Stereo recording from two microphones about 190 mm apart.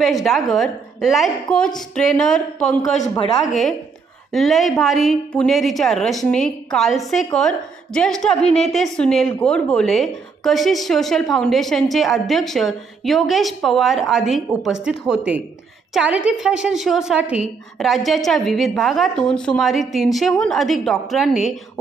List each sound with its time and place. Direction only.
0.0 s a woman's voice: centre (ahead or behind)
4.3 s a woman's voice: centre (ahead or behind)
8.5 s a woman's voice: 35° left (ahead or behind)
8.7 s a woman's voice: 5° left (ahead or behind)